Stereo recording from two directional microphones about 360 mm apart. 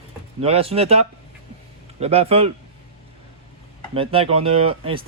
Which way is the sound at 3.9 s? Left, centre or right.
Centre.